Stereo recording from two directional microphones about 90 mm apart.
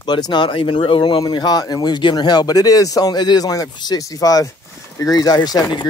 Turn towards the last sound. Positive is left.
turn(degrees=45)  # may be behind; listen again after turning